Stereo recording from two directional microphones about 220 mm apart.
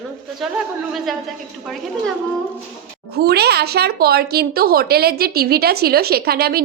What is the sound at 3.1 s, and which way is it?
Speech, 45° right (ahead or behind).